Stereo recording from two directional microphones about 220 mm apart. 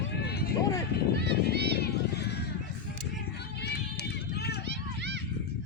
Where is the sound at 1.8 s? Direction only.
45° left (ahead or behind).